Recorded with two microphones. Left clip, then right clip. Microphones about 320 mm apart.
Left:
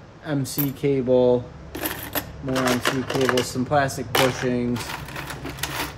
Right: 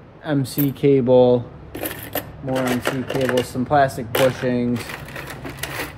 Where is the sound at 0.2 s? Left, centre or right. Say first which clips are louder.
Right 5 dB; centre.